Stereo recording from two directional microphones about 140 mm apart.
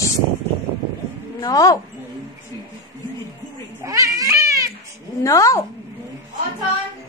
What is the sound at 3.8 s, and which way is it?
Cat, 20° right (ahead or behind).